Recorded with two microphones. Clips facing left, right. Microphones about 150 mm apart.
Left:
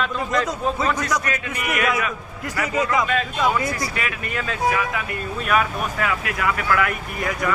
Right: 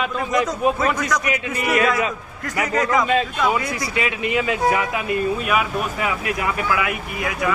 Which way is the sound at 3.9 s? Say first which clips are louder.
Right 6 dB; 20° right (ahead or behind).